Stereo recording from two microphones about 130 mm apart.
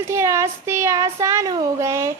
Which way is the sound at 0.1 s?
20° right (ahead or behind).